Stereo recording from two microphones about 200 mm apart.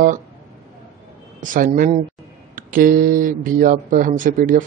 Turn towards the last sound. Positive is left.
turn(degrees=-40)  # may be behind; listen again after turning